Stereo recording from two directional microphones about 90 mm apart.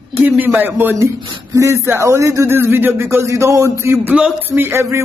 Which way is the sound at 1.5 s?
35° right (ahead or behind).